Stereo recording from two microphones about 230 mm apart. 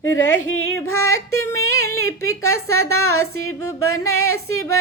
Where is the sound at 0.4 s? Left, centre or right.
Left.